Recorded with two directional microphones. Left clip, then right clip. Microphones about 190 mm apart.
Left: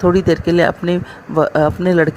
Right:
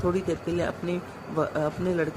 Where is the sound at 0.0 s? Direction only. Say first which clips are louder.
Left 13 dB; 45° left (ahead or behind).